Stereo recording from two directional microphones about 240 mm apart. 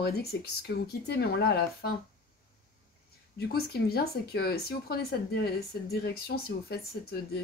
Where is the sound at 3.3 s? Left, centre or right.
Left.